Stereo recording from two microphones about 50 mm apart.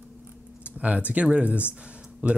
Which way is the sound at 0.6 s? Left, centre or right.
Right.